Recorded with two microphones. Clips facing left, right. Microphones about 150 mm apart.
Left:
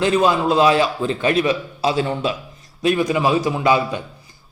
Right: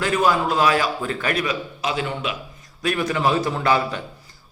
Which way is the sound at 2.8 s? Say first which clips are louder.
Left 4 dB; 20° left (ahead or behind).